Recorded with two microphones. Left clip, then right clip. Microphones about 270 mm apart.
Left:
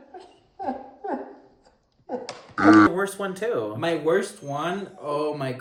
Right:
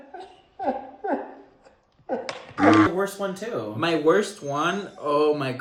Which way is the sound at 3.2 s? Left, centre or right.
Left.